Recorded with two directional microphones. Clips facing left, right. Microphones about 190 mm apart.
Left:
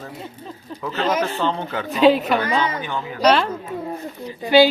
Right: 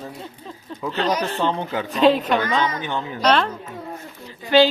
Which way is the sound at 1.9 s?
Centre (ahead or behind).